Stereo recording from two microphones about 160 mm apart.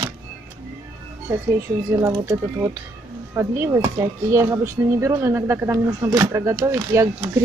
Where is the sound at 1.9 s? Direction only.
20° right (ahead or behind).